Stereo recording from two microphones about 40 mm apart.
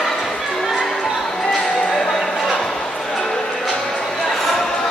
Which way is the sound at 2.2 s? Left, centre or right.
Centre.